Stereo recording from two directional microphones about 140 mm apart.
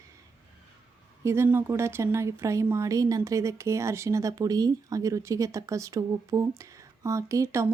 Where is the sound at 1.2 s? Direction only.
20° right (ahead or behind).